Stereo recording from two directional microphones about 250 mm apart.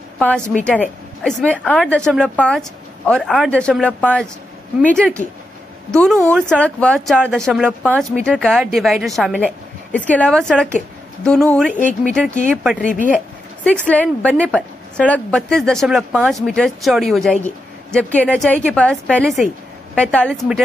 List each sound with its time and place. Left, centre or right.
0.2 s a woman's voice: centre
12.8 s speech: left
13.7 s a woman's voice: centre